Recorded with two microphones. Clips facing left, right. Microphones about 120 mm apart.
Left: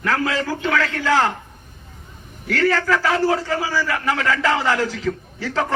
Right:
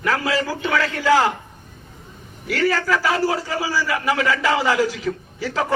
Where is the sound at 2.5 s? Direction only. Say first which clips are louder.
Left 1 dB; 10° right (ahead or behind).